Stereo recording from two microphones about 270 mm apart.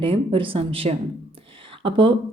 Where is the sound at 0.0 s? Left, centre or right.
Centre.